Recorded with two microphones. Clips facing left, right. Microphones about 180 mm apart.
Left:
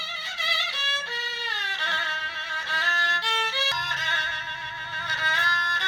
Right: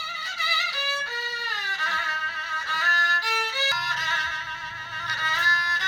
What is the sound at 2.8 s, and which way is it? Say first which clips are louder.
Violin: even; 25° left (ahead or behind).